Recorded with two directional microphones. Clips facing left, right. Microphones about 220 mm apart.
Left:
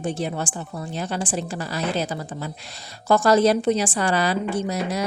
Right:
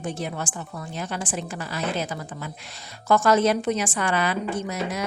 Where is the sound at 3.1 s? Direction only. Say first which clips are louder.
Left 3 dB; 35° left (ahead or behind).